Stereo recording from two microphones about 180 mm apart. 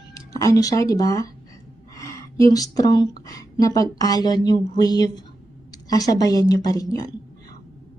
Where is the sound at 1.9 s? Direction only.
20° left (ahead or behind).